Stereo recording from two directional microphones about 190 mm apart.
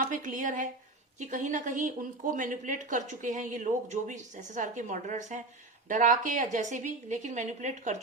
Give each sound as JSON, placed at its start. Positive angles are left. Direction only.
{"t": 0.0, "sound": "a woman's voice", "side_deg": -45}